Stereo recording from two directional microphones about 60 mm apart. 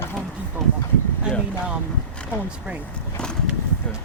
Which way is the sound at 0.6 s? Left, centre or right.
Centre.